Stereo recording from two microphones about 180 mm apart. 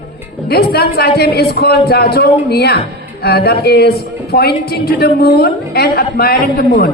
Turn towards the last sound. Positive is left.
turn(degrees=55)  # may be behind; listen again after turning